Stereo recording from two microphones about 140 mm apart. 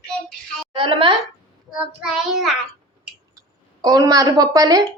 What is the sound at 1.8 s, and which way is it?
Child singing, 5° right (ahead or behind).